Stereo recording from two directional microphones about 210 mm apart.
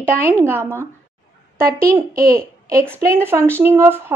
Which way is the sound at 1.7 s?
15° right (ahead or behind).